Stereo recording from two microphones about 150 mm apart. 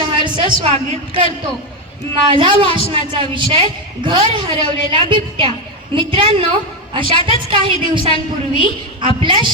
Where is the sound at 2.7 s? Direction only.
40° left (ahead or behind).